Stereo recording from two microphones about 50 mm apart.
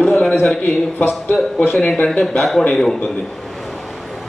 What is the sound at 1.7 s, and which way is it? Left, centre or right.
Speech, centre.